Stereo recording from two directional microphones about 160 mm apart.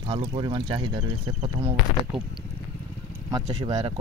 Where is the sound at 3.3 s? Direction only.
25° right (ahead or behind).